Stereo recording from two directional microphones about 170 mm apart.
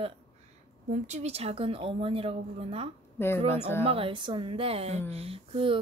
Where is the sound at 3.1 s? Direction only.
15° left (ahead or behind).